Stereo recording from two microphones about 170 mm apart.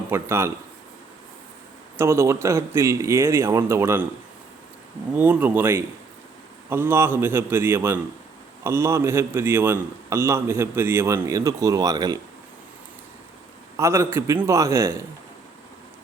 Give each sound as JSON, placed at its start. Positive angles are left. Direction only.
{"t": 0.1, "sound": "a man's voice", "side_deg": -15}
{"t": 2.0, "sound": "a man's voice", "side_deg": -15}
{"t": 5.1, "sound": "a man's voice", "side_deg": -10}
{"t": 13.7, "sound": "a man's voice", "side_deg": -15}